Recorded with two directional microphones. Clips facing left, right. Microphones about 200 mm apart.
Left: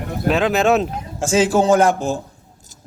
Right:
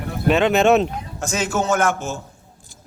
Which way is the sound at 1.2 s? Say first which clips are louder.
Left 7 dB; 30° left (ahead or behind).